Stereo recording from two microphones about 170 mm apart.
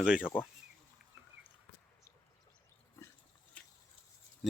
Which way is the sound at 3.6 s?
5° left (ahead or behind).